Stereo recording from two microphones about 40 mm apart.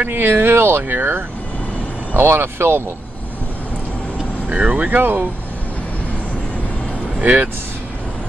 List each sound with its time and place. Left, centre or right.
0.1 s speech: right
4.5 s speech: right
7.2 s speech: right